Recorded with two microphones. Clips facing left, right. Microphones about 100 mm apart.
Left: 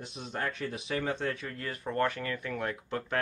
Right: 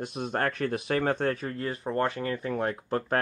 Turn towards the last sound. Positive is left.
turn(degrees=-40)  # may be behind; listen again after turning